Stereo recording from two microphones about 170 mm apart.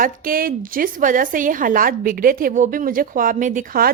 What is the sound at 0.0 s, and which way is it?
Speech, 55° right (ahead or behind).